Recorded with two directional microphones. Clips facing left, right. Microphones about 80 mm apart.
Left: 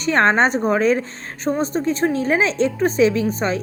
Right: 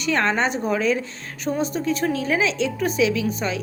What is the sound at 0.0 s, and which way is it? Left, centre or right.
A woman's voice, left.